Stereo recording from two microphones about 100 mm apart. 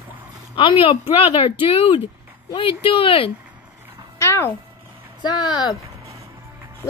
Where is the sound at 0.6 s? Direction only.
60° left (ahead or behind).